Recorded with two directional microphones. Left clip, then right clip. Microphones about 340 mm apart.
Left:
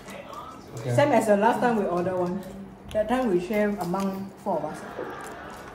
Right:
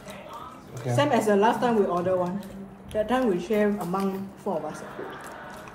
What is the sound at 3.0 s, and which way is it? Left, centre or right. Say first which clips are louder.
Speech: right 2 dB; centre.